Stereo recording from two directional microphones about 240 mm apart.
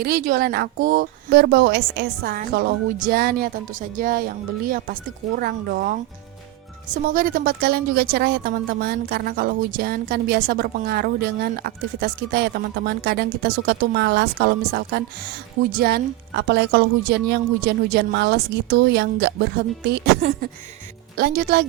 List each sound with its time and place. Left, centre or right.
0.0 s a woman's voice: right